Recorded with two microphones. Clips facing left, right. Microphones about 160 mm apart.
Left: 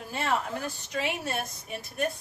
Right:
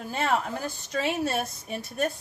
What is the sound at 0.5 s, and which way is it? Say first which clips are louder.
A woman's voice: right 2 dB; 35° right (ahead or behind).